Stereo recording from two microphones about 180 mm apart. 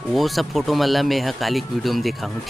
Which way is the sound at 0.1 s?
Centre (ahead or behind).